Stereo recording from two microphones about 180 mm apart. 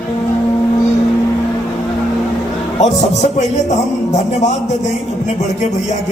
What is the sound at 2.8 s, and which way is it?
Speech, 40° left (ahead or behind).